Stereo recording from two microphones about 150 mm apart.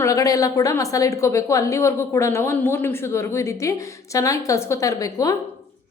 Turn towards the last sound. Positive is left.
turn(degrees=25)  # may be behind; listen again after turning